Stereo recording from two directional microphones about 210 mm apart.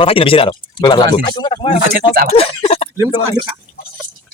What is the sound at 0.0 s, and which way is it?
Speech, 25° left (ahead or behind).